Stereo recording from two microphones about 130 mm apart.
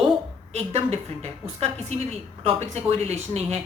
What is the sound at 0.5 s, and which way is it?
A woman's voice, 55° right (ahead or behind).